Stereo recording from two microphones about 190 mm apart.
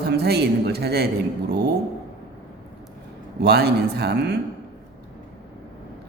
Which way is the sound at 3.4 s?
55° right (ahead or behind).